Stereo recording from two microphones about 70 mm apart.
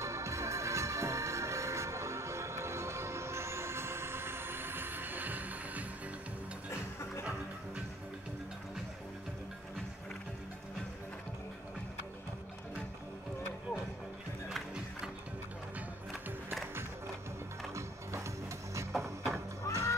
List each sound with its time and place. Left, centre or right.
0.0 s music: right
19.0 s music: right